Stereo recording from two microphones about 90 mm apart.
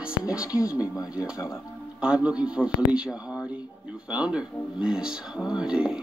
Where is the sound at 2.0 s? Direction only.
10° right (ahead or behind).